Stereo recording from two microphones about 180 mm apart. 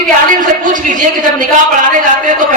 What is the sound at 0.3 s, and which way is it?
A man's voice, 45° right (ahead or behind).